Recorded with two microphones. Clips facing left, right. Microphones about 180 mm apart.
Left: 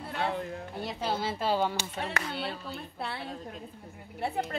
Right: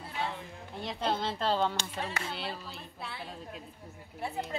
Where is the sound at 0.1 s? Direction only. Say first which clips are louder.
Left 5 dB; 60° left (ahead or behind).